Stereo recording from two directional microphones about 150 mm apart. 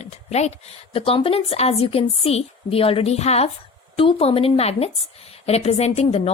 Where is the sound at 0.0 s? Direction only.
45° left (ahead or behind).